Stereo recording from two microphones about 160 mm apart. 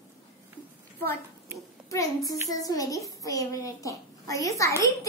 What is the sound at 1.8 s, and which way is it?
A child's voice, 20° left (ahead or behind).